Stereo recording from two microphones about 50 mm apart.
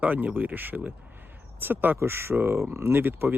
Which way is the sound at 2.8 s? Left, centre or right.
Right.